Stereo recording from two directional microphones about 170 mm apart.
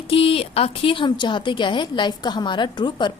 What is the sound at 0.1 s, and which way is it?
A woman's voice, 35° left (ahead or behind).